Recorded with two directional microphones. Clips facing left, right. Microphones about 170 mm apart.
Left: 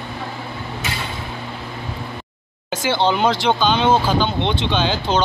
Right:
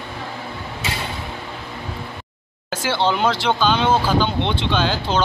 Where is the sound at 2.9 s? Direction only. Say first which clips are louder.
Left 2 dB; centre (ahead or behind).